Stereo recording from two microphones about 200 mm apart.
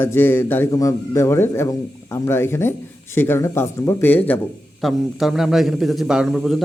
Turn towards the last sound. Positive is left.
turn(degrees=0)  # may be behind; listen again after turning